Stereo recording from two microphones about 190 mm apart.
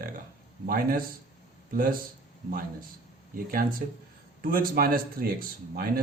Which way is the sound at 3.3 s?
50° right (ahead or behind).